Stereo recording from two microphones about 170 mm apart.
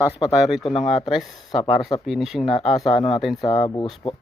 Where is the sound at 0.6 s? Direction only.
30° left (ahead or behind).